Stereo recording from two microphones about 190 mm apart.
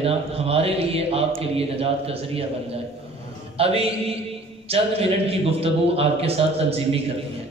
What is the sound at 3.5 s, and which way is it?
A man's voice, 30° right (ahead or behind).